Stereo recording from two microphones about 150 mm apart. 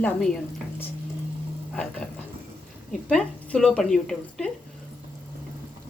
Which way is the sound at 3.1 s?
5° left (ahead or behind).